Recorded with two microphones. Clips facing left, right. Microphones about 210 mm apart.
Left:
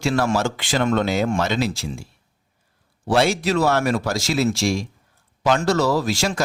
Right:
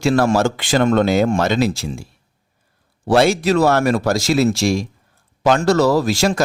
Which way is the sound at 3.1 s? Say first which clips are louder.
Right 5 dB; 45° right (ahead or behind).